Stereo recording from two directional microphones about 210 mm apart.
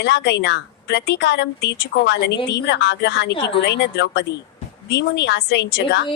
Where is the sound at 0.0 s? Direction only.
55° left (ahead or behind).